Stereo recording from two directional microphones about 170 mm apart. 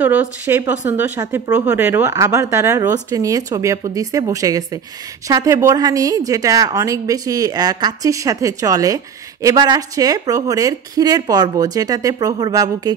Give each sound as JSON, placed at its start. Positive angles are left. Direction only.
{"t": 0.0, "sound": "a woman's voice", "side_deg": -10}